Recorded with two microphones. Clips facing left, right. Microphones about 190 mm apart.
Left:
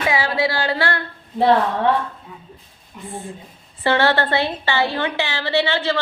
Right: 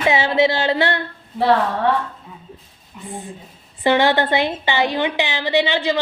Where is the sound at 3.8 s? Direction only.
15° right (ahead or behind).